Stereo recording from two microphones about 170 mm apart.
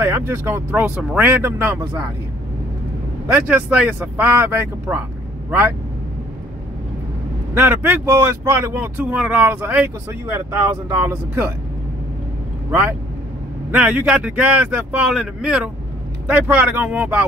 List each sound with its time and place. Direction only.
0.0 s speech: 15° right (ahead or behind)
3.3 s speech: 10° right (ahead or behind)
7.5 s speech: 10° right (ahead or behind)
13.7 s speech: 10° right (ahead or behind)